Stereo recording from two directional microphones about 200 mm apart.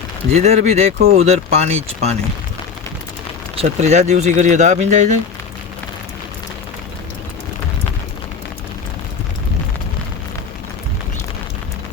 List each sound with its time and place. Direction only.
0.3 s speech: 35° right (ahead or behind)
3.5 s speech: 30° right (ahead or behind)